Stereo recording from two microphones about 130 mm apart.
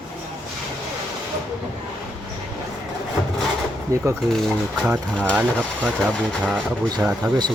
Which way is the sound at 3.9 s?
25° right (ahead or behind).